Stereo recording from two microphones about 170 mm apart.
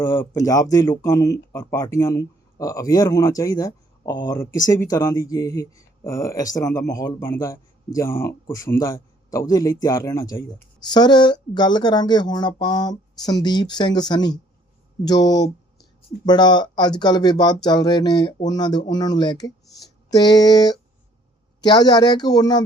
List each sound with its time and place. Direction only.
0.0 s speech: 15° left (ahead or behind)